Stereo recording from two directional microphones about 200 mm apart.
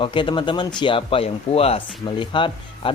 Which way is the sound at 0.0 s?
25° left (ahead or behind).